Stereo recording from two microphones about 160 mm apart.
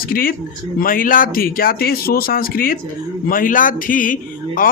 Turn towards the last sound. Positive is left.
turn(degrees=60)  # may be behind; listen again after turning